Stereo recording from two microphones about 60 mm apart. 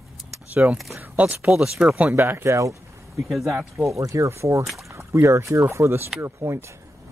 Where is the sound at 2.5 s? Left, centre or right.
Right.